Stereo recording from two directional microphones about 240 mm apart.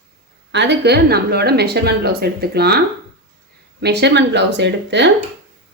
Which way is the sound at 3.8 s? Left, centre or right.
Right.